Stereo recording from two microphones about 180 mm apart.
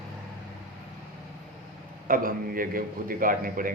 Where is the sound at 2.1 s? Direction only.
50° right (ahead or behind).